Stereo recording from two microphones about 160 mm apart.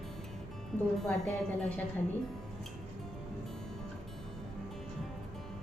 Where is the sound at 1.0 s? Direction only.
5° left (ahead or behind).